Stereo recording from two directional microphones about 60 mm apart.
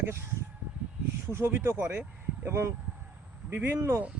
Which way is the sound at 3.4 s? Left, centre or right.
Right.